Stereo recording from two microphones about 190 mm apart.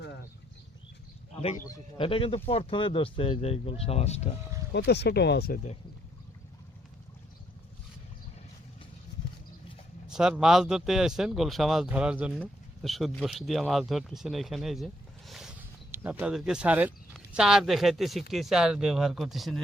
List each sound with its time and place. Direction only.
1.4 s speech: 35° left (ahead or behind)
1.6 s a man's voice: 15° left (ahead or behind)
2.0 s speech: 30° left (ahead or behind)
4.7 s speech: 60° left (ahead or behind)
10.1 s speech: 5° right (ahead or behind)